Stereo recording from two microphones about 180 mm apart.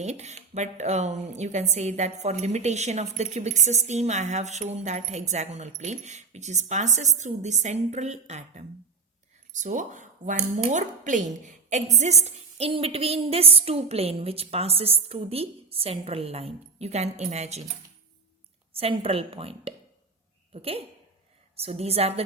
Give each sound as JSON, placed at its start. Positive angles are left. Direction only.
{"t": 0.0, "sound": "a woman's voice", "side_deg": -40}
{"t": 18.8, "sound": "a woman's voice", "side_deg": -30}